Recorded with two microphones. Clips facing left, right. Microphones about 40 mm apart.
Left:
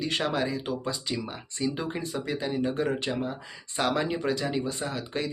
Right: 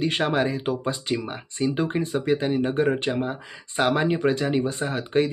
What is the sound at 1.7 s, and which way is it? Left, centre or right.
Speech, right.